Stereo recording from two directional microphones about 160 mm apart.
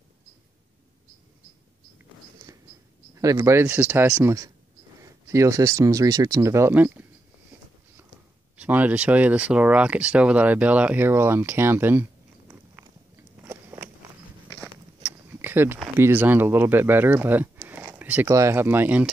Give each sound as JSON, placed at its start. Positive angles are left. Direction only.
{"t": 3.2, "sound": "speech", "side_deg": -20}
{"t": 8.5, "sound": "speech", "side_deg": -10}
{"t": 13.4, "sound": "biting", "side_deg": -15}
{"t": 15.4, "sound": "speech", "side_deg": -15}